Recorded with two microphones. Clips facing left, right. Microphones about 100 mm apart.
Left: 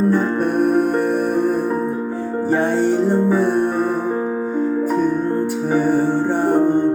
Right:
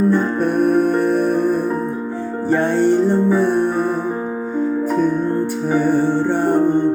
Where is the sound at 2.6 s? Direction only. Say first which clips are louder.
Right 3 dB; 10° left (ahead or behind).